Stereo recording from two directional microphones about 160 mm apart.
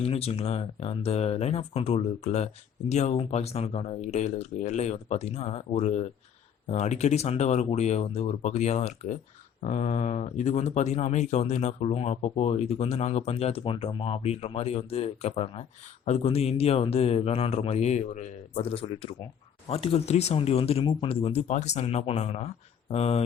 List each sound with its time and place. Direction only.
0.0 s speech: 40° left (ahead or behind)